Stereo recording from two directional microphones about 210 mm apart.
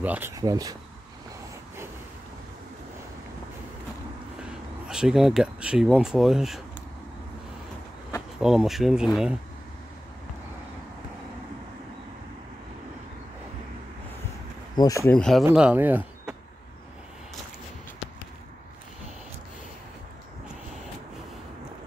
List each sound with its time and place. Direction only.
0.0 s speech: 10° right (ahead or behind)
4.8 s speech: centre (ahead or behind)
8.4 s speech: centre (ahead or behind)
14.8 s speech: 15° left (ahead or behind)
15.4 s speech: 5° right (ahead or behind)